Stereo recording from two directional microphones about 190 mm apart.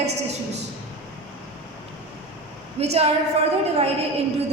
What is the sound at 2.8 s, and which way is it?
Speech, 35° right (ahead or behind).